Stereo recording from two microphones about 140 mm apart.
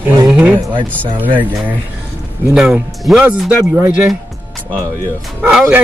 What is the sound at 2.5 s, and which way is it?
Speech, 5° right (ahead or behind).